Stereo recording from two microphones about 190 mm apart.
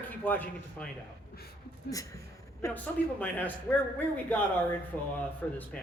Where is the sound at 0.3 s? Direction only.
10° left (ahead or behind).